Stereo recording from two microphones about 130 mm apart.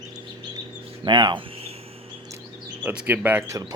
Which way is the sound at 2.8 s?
10° right (ahead or behind).